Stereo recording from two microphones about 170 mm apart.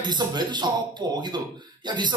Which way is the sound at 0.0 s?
25° right (ahead or behind).